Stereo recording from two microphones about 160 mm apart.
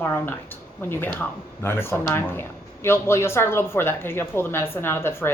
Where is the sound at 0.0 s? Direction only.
10° left (ahead or behind).